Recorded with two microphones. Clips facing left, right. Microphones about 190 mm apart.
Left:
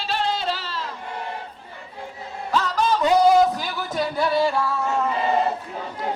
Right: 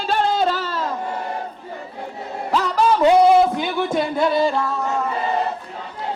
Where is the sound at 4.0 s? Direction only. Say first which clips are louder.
Right 1 dB; 20° right (ahead or behind).